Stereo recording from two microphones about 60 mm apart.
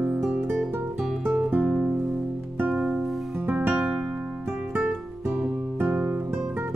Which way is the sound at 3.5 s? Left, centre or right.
Right.